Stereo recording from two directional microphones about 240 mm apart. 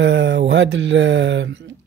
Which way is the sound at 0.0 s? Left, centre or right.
Right.